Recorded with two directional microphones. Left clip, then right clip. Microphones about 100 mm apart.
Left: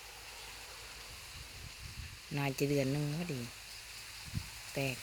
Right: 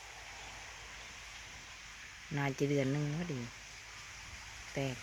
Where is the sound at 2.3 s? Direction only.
15° left (ahead or behind).